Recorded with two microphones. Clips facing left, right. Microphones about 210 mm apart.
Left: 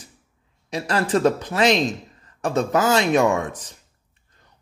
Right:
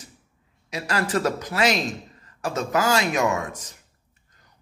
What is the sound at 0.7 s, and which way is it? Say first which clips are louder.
A man's voice: left 4 dB; 30° left (ahead or behind).